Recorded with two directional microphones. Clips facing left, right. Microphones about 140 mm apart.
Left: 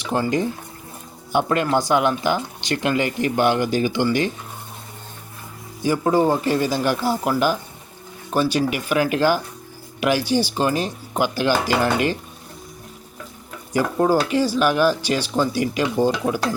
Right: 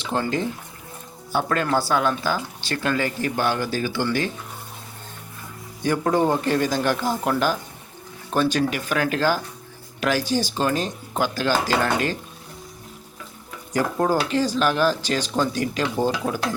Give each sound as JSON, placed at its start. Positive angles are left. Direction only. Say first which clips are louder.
{"t": 0.0, "sound": "speech", "louder": "left 3 dB", "side_deg": 15}
{"t": 5.8, "sound": "speech", "louder": "left 2 dB", "side_deg": 5}
{"t": 13.7, "sound": "speech", "louder": "left 3 dB", "side_deg": 10}